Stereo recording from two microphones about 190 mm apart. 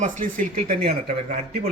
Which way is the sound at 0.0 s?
45° right (ahead or behind).